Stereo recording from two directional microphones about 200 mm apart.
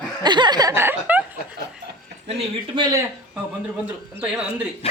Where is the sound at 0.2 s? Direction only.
20° right (ahead or behind).